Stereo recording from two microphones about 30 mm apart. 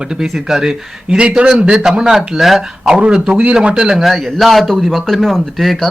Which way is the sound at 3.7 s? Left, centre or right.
Right.